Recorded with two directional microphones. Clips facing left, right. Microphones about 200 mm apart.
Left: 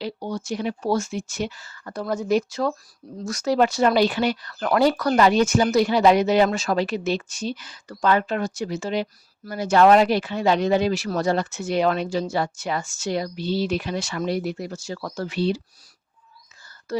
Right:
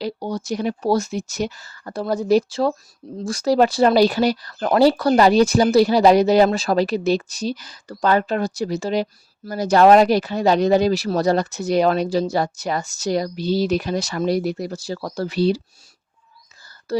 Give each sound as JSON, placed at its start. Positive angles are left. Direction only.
{"t": 0.0, "sound": "speech", "side_deg": -40}
{"t": 16.9, "sound": "speech", "side_deg": -30}